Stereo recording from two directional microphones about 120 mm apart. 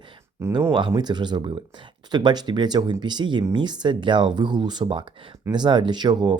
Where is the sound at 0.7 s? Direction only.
40° right (ahead or behind).